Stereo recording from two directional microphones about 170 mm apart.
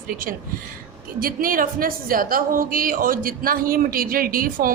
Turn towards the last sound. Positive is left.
turn(degrees=-55)  # may be behind; listen again after turning